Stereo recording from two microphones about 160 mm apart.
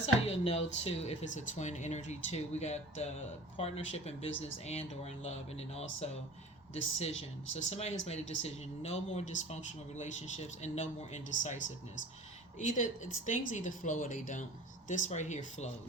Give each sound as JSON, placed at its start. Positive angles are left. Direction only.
{"t": 0.0, "sound": "speech", "side_deg": 40}